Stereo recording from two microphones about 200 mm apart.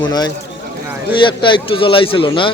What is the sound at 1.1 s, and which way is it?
Speech, 25° left (ahead or behind).